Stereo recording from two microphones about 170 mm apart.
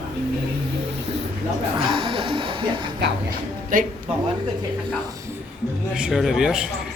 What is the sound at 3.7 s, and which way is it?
Speech, 55° right (ahead or behind).